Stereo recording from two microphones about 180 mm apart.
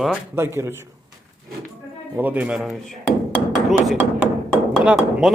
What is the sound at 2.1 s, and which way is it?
A man's voice, 10° right (ahead or behind).